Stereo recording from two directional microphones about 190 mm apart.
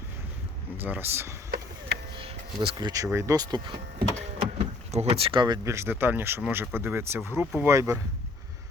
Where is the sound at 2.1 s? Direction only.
30° right (ahead or behind).